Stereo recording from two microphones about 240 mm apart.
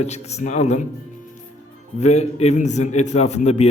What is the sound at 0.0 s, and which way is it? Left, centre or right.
Speech, left.